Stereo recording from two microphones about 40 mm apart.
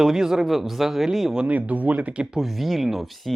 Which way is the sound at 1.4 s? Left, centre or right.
Right.